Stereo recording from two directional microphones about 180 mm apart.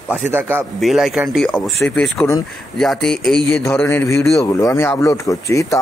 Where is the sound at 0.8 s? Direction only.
Centre (ahead or behind).